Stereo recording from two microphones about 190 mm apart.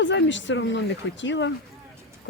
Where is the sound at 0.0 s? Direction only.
70° left (ahead or behind).